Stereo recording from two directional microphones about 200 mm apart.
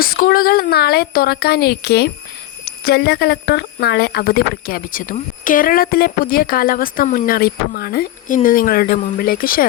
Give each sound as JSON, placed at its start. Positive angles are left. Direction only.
{"t": 0.0, "sound": "speech", "side_deg": 45}